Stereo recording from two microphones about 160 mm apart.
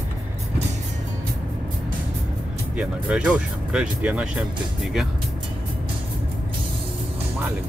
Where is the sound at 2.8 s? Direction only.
5° right (ahead or behind).